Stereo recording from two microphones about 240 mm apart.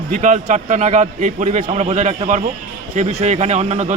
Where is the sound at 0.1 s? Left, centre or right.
Right.